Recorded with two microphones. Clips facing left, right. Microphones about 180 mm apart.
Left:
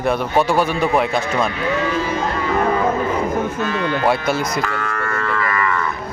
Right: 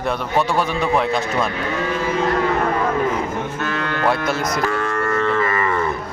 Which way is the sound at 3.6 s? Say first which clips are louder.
Left 3 dB; 60° right (ahead or behind).